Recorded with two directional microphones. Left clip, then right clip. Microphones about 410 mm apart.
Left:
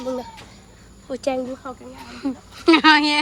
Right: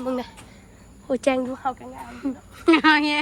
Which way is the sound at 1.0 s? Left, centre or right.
Centre.